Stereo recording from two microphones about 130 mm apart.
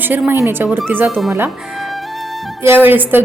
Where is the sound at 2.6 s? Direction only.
15° right (ahead or behind).